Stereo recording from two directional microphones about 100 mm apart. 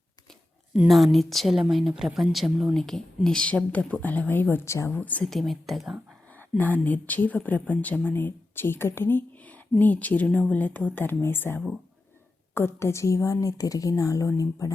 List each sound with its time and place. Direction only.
0.9 s a woman's voice: centre (ahead or behind); by 5.2 s 15° left (ahead or behind)
5.2 s a woman's voice: centre (ahead or behind)
6.6 s a woman's voice: 15° left (ahead or behind); by 14.7 s 30° left (ahead or behind)